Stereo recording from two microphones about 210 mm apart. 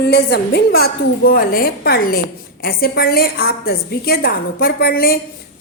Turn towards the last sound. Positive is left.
turn(degrees=45)  # may be behind; listen again after turning